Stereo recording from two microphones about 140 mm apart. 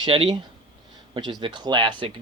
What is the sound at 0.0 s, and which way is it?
Speech, 35° right (ahead or behind).